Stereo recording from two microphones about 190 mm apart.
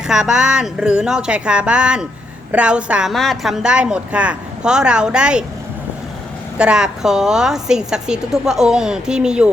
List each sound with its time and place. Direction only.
0.1 s a woman's voice: 5° right (ahead or behind)
6.6 s a woman's voice: 5° right (ahead or behind)